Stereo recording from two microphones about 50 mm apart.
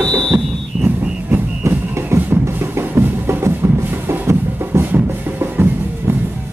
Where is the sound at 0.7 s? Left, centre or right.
Right.